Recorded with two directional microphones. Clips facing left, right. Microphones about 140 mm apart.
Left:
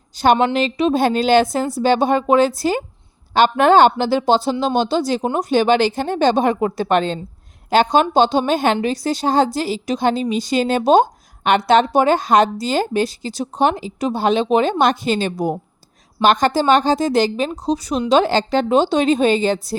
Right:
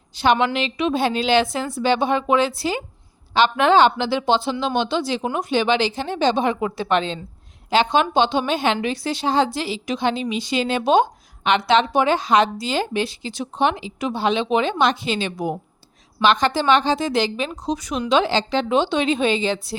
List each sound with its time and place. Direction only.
0.1 s a woman's voice: 40° left (ahead or behind)
18.1 s a woman's voice: 45° left (ahead or behind)